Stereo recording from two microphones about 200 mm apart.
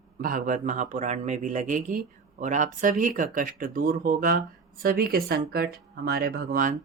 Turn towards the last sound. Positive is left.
turn(degrees=-45)  # may be behind; listen again after turning